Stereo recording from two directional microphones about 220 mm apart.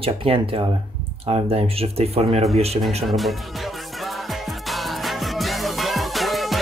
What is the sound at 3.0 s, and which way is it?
Music, centre (ahead or behind).